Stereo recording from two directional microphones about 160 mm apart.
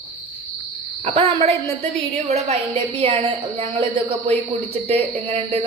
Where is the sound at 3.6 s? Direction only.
35° right (ahead or behind).